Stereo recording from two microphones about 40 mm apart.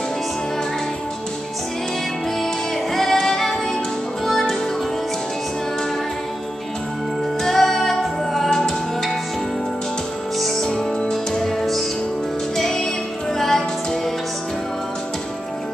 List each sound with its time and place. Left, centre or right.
2.9 s music: centre
7.4 s music: centre
10.4 s music: centre
12.5 s music: centre